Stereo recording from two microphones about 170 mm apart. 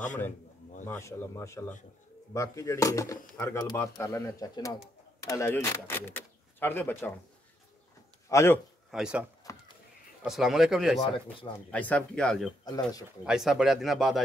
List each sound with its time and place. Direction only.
0.8 s speech: 15° left (ahead or behind)
8.3 s speech: 15° left (ahead or behind)
8.9 s speech: 5° right (ahead or behind)
9.4 s a sound: 20° left (ahead or behind)
10.2 s speech: 5° right (ahead or behind)
11.0 s speech: 30° left (ahead or behind)
11.7 s speech: 10° left (ahead or behind)
12.6 s speech: 20° left (ahead or behind)
13.2 s speech: 5° right (ahead or behind)